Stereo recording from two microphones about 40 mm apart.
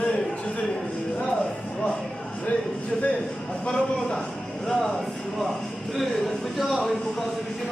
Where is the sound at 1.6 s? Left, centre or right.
Left.